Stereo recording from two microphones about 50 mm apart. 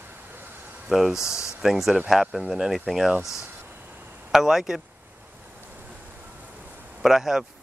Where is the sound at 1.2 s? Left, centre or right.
Left.